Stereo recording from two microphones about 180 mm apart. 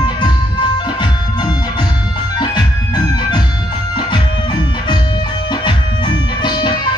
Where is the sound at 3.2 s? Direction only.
25° left (ahead or behind).